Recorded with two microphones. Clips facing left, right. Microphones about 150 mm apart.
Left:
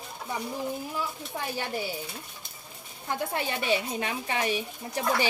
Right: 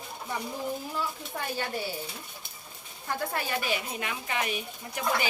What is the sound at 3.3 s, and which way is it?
Speech, 25° left (ahead or behind).